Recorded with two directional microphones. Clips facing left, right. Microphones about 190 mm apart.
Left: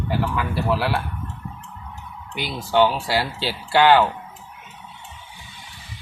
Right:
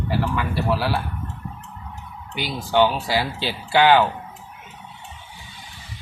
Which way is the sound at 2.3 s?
Centre (ahead or behind).